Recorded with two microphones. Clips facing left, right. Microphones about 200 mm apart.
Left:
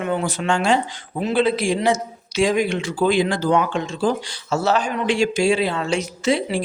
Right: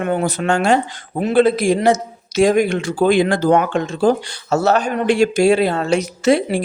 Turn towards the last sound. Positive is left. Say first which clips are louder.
# right 5 dB
turn(degrees=-70)  # may be behind; listen again after turning